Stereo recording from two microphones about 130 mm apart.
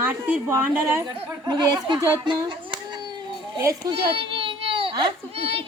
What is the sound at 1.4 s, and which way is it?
Speech, 35° right (ahead or behind).